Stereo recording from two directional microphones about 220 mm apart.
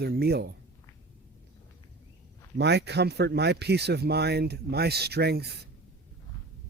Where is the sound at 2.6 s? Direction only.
50° right (ahead or behind).